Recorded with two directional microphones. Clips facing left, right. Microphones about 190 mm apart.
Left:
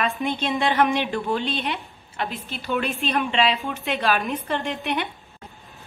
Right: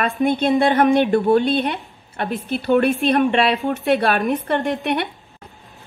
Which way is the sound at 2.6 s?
55° right (ahead or behind).